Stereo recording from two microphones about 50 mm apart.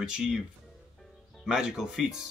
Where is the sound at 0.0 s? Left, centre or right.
Centre.